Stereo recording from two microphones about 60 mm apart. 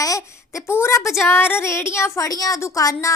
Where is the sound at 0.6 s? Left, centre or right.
Left.